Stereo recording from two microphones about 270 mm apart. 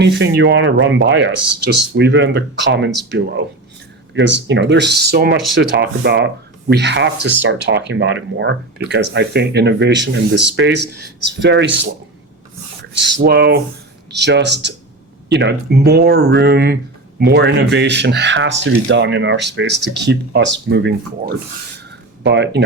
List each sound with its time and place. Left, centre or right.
0.0 s speech: right
13.1 s speech: right